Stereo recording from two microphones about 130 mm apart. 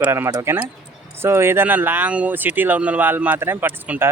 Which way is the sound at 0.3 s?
30° right (ahead or behind).